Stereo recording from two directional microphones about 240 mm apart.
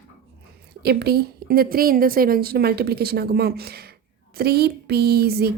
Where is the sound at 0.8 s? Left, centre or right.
Right.